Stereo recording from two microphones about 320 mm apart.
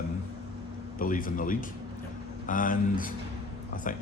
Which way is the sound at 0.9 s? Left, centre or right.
Left.